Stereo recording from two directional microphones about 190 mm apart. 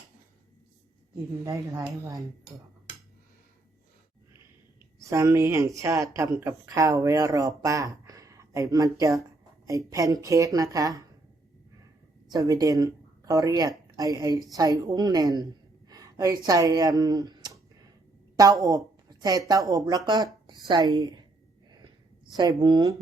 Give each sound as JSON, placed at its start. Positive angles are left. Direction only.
{"t": 1.5, "sound": "speech", "side_deg": -20}
{"t": 4.9, "sound": "speech", "side_deg": -15}
{"t": 12.3, "sound": "speech", "side_deg": -20}
{"t": 15.9, "sound": "a sound", "side_deg": -20}
{"t": 16.5, "sound": "speech", "side_deg": -20}
{"t": 22.4, "sound": "speech", "side_deg": -25}